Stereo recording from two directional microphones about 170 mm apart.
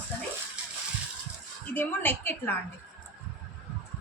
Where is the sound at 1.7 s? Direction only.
10° left (ahead or behind).